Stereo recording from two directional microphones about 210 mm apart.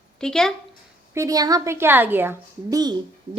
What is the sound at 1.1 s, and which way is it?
Speech, 15° right (ahead or behind).